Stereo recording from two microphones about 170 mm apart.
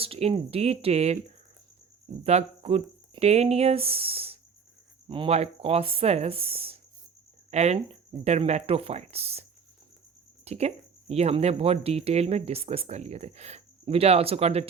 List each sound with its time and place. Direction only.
0.0 s speech: 35° right (ahead or behind)
2.2 s speech: 35° right (ahead or behind)
10.4 s speech: 40° right (ahead or behind)